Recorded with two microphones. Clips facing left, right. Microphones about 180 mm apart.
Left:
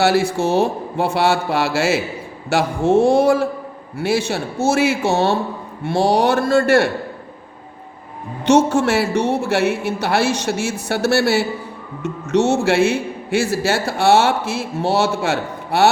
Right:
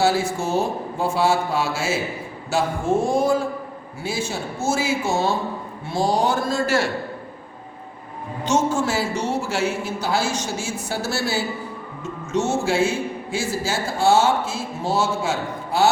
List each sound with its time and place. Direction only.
0.0 s a man's voice: 70° left (ahead or behind)
8.4 s a man's voice: 70° left (ahead or behind)